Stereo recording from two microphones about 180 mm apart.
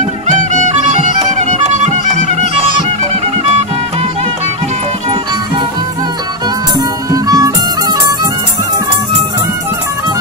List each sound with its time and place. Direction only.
0.3 s music: 45° right (ahead or behind)
7.1 s music: 20° right (ahead or behind)